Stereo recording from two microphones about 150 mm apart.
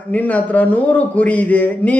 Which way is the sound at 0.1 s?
10° left (ahead or behind).